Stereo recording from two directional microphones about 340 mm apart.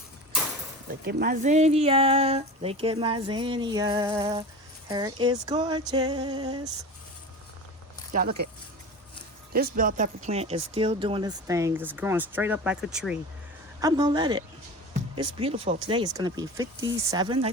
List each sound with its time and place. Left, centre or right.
0.9 s speech: right
8.1 s speech: right
9.5 s speech: right; by 13.1 s centre
13.8 s speech: centre